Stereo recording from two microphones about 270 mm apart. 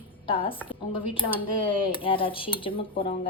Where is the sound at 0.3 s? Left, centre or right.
Centre.